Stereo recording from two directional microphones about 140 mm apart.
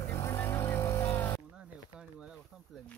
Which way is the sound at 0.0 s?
15° left (ahead or behind).